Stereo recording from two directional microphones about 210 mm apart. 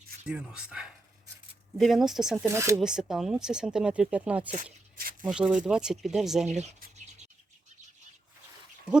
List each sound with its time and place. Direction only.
0.3 s speech: 5° right (ahead or behind)
2.5 s speech: 15° right (ahead or behind)
2.8 s speech: centre (ahead or behind)
4.5 s a sound: 45° right (ahead or behind)
5.2 s speech: 5° right (ahead or behind)
6.7 s scratch: 45° right (ahead or behind)